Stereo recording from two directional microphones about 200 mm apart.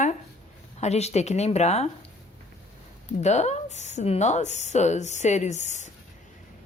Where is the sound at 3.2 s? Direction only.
35° left (ahead or behind).